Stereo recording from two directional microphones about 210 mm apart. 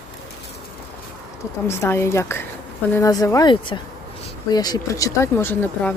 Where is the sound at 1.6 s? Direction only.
10° left (ahead or behind).